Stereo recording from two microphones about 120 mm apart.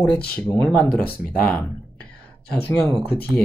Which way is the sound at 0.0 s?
10° left (ahead or behind).